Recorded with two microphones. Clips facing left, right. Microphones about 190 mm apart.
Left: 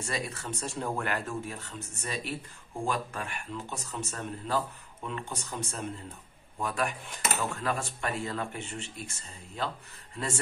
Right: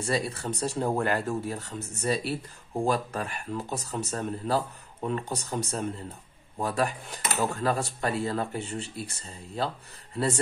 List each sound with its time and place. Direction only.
0.0 s speech: 35° right (ahead or behind)